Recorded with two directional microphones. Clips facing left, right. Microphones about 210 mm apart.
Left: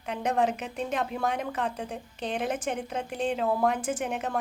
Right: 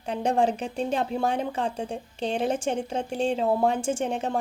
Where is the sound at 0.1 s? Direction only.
30° right (ahead or behind).